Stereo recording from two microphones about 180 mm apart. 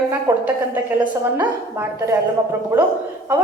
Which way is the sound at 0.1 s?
10° right (ahead or behind).